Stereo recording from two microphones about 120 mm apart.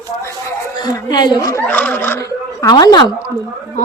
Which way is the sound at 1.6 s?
15° left (ahead or behind).